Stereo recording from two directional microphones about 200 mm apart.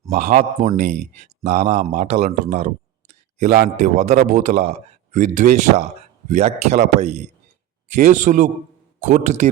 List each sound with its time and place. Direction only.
0.1 s speech: 40° right (ahead or behind)